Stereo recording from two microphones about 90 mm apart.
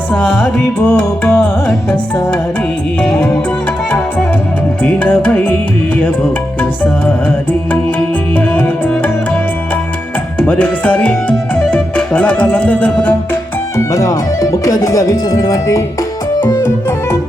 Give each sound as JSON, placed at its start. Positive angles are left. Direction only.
{"t": 0.1, "sound": "music", "side_deg": 15}
{"t": 4.8, "sound": "music", "side_deg": 15}
{"t": 7.7, "sound": "music", "side_deg": 15}
{"t": 10.4, "sound": "speech", "side_deg": 15}
{"t": 13.7, "sound": "speech", "side_deg": 35}
{"t": 16.4, "sound": "music", "side_deg": 40}